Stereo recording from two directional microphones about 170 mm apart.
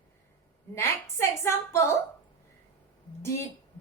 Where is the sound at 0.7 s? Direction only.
15° left (ahead or behind).